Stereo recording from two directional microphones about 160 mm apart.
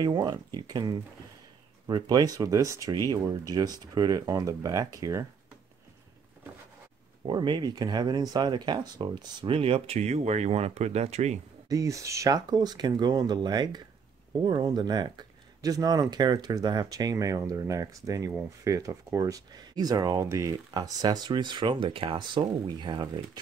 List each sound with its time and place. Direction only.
0.0 s speech: 25° right (ahead or behind)
7.2 s speech: 30° right (ahead or behind)
11.7 s speech: 20° right (ahead or behind)